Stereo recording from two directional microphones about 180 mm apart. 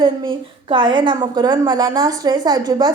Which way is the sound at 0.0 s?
30° right (ahead or behind).